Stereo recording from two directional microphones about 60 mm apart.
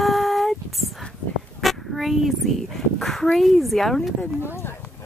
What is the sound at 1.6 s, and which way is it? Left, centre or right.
Speech, centre.